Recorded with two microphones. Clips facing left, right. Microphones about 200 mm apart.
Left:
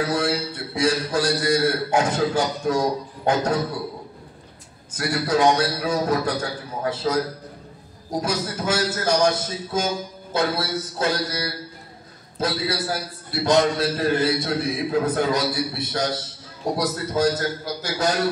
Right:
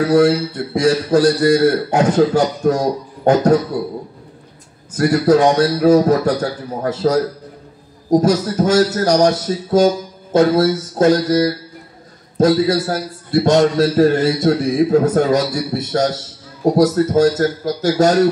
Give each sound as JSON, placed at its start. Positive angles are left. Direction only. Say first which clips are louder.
{"t": 0.7, "sound": "a man's voice", "louder": "right 8 dB", "side_deg": -40}
{"t": 4.9, "sound": "a man's voice", "louder": "right 10 dB", "side_deg": -40}